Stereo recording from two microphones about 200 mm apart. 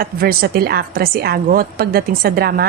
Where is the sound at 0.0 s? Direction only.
50° right (ahead or behind).